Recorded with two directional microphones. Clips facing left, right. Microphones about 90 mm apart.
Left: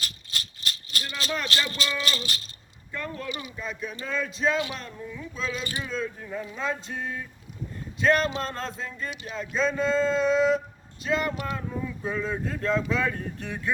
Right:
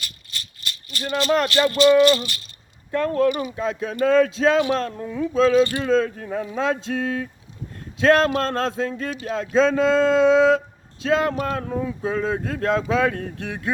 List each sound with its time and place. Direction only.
1.0 s speech: 45° right (ahead or behind)
2.9 s speech: 80° right; by 3.5 s 55° right (ahead or behind)
3.6 s speech: 90° right
4.8 s speech: 70° right (ahead or behind); by 11.3 s 90° right
11.5 s speech: 60° right (ahead or behind)